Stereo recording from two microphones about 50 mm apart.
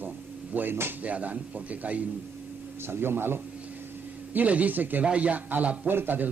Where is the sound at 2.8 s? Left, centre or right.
Right.